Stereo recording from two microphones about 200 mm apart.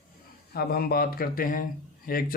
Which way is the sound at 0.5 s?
50° left (ahead or behind).